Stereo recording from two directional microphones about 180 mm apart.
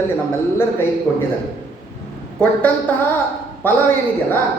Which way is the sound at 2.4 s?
10° left (ahead or behind).